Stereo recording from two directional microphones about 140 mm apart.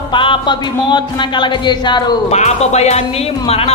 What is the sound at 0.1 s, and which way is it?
Speech, 35° left (ahead or behind).